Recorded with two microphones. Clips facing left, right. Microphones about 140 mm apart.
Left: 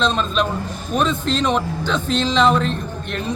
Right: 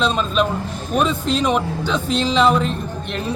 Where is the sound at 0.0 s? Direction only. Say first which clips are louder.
Right 1 dB; 5° right (ahead or behind).